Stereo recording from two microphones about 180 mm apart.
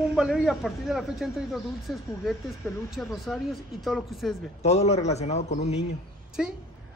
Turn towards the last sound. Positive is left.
turn(degrees=-5)  # may be behind; listen again after turning